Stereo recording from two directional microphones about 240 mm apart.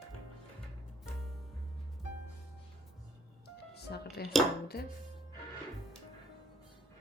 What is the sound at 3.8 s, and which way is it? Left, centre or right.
Music, left.